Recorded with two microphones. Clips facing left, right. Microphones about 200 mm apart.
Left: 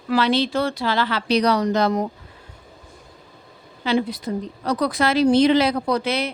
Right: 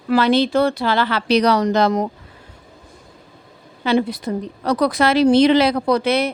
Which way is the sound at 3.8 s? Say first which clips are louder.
Right 3 dB; 60° right (ahead or behind).